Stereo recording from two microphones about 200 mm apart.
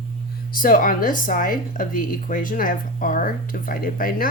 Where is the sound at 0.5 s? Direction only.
45° left (ahead or behind).